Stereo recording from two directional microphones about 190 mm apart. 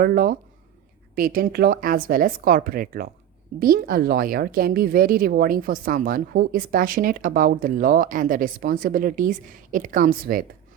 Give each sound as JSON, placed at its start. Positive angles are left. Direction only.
{"t": 0.0, "sound": "speech", "side_deg": -50}